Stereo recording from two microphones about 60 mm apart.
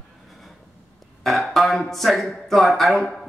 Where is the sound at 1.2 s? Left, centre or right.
Centre.